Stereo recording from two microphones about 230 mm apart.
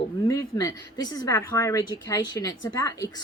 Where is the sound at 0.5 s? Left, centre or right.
Centre.